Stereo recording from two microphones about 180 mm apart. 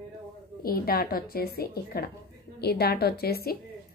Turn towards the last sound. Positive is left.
turn(degrees=60)  # may be behind; listen again after turning